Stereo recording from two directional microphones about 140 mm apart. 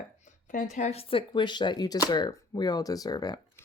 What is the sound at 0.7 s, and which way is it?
Speech, 55° left (ahead or behind).